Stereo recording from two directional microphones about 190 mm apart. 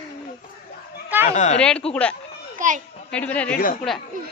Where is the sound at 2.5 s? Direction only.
40° right (ahead or behind).